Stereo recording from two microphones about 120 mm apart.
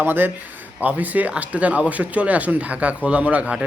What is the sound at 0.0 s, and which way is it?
Speech, 15° right (ahead or behind).